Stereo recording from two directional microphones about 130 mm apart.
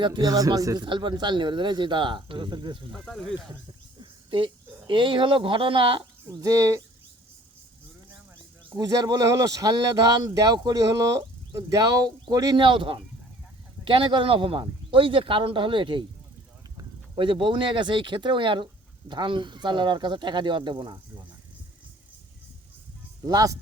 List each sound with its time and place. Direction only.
0.0 s speech: 30° right (ahead or behind)
4.0 s speech: 40° right (ahead or behind)
6.4 s speech: 25° right (ahead or behind)
8.7 s speech: 30° right (ahead or behind)
12.6 s speech: 40° right (ahead or behind)
17.2 s speech: 40° right (ahead or behind)
23.2 s speech: 25° right (ahead or behind)